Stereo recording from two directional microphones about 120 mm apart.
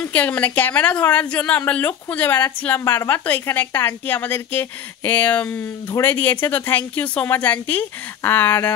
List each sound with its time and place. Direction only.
0.0 s speech: 15° left (ahead or behind)